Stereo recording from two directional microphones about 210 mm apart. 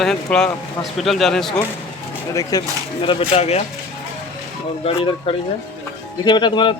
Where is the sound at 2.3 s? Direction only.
15° left (ahead or behind).